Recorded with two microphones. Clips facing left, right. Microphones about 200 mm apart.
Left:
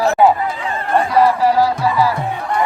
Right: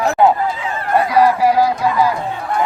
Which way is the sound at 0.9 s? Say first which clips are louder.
Even; 10° right (ahead or behind).